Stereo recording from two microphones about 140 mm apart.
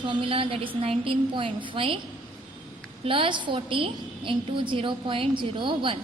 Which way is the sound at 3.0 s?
40° right (ahead or behind).